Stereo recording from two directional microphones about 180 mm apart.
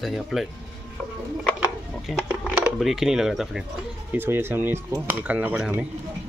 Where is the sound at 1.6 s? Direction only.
5° right (ahead or behind).